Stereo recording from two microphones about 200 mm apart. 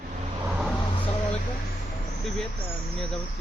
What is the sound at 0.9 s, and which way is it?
Vehicle, 30° left (ahead or behind).